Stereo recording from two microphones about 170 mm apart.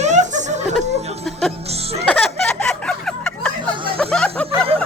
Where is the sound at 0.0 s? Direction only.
45° right (ahead or behind).